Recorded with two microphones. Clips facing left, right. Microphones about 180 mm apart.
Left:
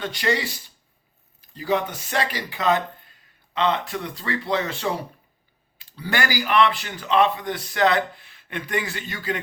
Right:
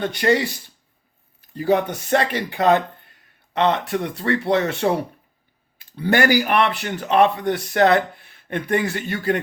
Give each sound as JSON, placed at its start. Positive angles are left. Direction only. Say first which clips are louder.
{"t": 0.0, "sound": "a man's voice", "louder": "right 6 dB", "side_deg": -55}
{"t": 1.5, "sound": "a man's voice", "louder": "right 5 dB", "side_deg": -55}